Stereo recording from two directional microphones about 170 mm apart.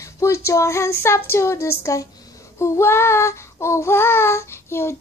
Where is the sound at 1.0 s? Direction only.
15° left (ahead or behind).